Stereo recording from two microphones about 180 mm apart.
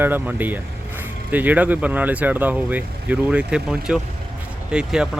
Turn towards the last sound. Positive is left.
turn(degrees=-5)  # may be behind; listen again after turning